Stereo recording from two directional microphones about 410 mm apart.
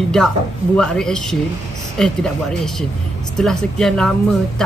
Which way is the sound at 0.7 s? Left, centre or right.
Centre.